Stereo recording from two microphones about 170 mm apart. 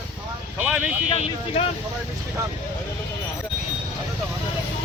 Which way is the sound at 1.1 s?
35° left (ahead or behind).